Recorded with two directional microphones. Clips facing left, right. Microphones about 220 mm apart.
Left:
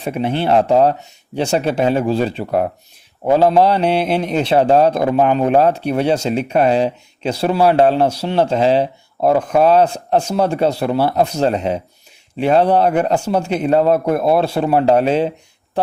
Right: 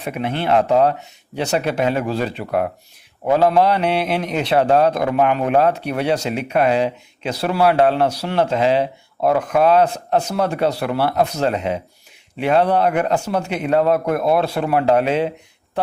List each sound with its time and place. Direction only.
0.0 s a man's voice: 30° left (ahead or behind)